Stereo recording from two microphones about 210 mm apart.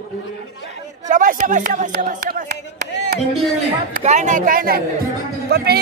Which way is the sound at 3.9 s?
35° right (ahead or behind).